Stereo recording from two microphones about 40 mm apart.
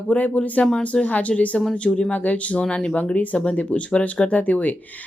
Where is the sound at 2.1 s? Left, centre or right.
Left.